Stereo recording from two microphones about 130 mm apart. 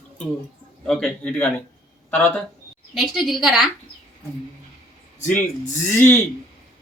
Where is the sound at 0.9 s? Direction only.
5° left (ahead or behind).